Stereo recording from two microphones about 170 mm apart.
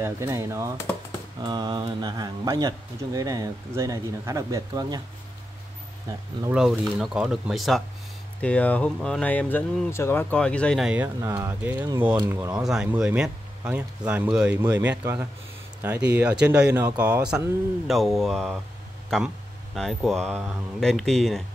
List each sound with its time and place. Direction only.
0.0 s speech: 15° right (ahead or behind)
6.5 s speech: 5° right (ahead or behind)
11.1 s speech: 15° right (ahead or behind)
12.6 s speech: 5° right (ahead or behind)